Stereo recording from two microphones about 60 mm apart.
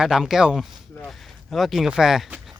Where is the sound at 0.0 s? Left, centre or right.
Centre.